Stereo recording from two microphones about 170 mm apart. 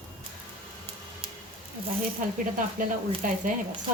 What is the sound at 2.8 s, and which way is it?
Speech, 55° right (ahead or behind).